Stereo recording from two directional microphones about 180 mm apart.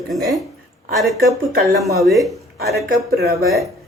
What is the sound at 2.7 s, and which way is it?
Speech, 65° right (ahead or behind).